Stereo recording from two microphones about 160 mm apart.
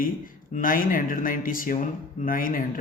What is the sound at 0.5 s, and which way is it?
Speech, 60° left (ahead or behind).